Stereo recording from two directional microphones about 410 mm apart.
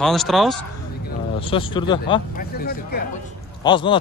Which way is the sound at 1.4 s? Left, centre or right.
Centre.